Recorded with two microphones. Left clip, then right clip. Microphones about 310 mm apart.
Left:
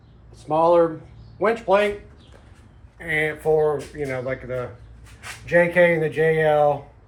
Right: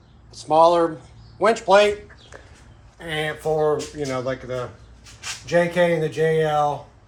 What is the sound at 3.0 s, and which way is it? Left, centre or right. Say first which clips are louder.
Speech: left 3 dB; centre.